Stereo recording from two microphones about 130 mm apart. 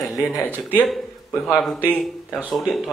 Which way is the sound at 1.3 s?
5° left (ahead or behind).